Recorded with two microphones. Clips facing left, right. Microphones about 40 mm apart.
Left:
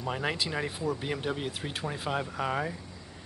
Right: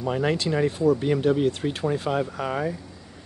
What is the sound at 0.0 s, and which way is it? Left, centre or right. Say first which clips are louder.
Speech: right 7 dB; centre.